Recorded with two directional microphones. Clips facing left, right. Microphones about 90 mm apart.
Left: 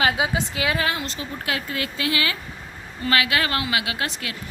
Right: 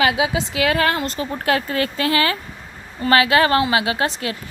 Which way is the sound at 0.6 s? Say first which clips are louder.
Right 7 dB; 60° right (ahead or behind).